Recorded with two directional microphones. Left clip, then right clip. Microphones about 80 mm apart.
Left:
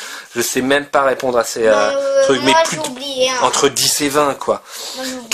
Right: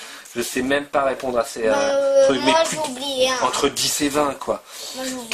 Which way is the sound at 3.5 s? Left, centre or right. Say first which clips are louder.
Left 6 dB; left.